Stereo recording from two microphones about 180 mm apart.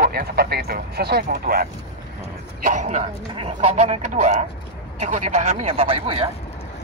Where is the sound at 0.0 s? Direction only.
60° right (ahead or behind).